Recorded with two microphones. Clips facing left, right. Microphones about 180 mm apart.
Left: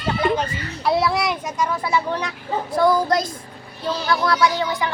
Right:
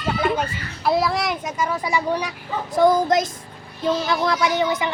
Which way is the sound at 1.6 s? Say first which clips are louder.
Right 1 dB; 10° right (ahead or behind).